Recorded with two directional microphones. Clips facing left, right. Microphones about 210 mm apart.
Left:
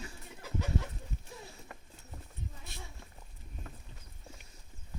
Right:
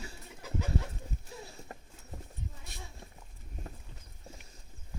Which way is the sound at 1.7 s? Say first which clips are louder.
Right 3 dB; 40° right (ahead or behind).